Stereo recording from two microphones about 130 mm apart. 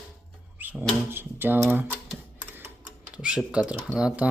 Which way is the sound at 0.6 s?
10° right (ahead or behind).